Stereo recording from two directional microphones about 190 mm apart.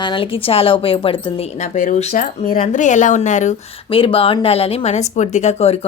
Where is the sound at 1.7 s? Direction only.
40° left (ahead or behind).